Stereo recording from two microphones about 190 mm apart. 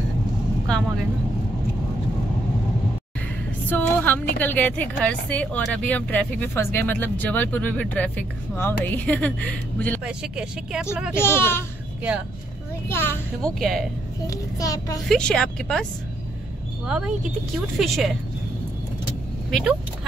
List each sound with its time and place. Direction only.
0.7 s speech: 5° left (ahead or behind)
3.6 s a sound: 10° left (ahead or behind)
4.4 s speech: 10° left (ahead or behind)
10.0 s speech: 5° right (ahead or behind)
11.1 s speech: 10° left (ahead or behind)
12.8 s speech: 10° left (ahead or behind)
14.2 s speech: 15° left (ahead or behind)
15.0 s speech: 5° left (ahead or behind)